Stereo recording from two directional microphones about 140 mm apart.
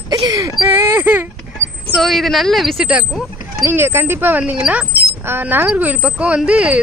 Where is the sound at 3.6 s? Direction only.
15° right (ahead or behind).